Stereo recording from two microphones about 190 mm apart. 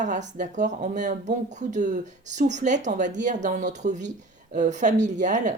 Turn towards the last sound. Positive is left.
turn(degrees=-40)  # may be behind; listen again after turning